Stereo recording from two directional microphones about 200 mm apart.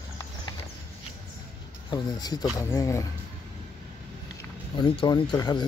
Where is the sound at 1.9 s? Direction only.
20° left (ahead or behind).